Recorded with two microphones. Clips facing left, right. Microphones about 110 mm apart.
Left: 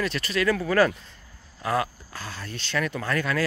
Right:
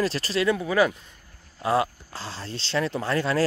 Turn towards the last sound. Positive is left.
turn(degrees=-25)  # may be behind; listen again after turning